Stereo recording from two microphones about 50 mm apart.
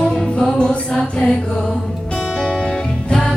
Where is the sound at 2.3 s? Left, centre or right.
Centre.